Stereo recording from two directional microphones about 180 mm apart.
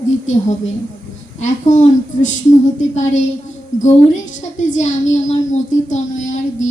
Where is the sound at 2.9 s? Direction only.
40° left (ahead or behind).